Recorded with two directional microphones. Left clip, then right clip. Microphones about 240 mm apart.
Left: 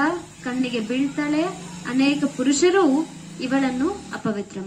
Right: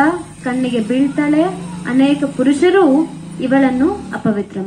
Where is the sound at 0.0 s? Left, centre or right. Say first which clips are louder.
Right 8 dB; left.